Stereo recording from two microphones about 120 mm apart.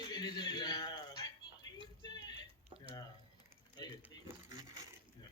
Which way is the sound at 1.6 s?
30° left (ahead or behind).